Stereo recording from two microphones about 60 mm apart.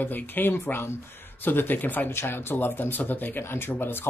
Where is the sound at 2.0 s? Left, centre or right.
Left.